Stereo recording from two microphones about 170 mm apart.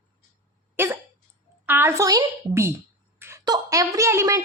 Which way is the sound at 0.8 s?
10° right (ahead or behind).